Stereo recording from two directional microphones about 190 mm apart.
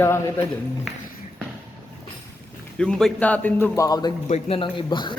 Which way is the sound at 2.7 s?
5° left (ahead or behind).